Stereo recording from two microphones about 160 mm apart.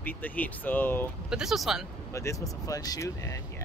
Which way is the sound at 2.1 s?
20° left (ahead or behind).